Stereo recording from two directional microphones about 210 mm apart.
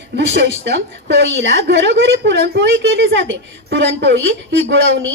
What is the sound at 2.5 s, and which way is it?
A woman's voice, 60° right (ahead or behind).